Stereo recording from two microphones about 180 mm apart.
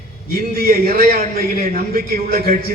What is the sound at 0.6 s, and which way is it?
A man's voice, 55° right (ahead or behind).